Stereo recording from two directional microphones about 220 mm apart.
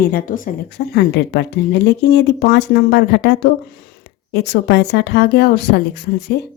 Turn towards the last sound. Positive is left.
turn(degrees=45)  # may be behind; listen again after turning